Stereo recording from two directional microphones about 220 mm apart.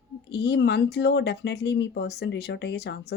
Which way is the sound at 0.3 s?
50° left (ahead or behind).